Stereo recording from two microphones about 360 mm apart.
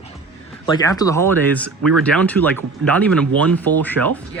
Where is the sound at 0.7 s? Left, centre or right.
Centre.